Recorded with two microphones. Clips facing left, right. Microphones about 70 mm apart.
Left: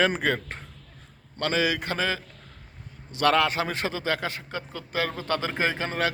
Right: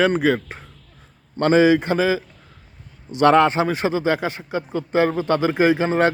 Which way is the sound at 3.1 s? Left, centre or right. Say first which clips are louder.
Right 8 dB; right.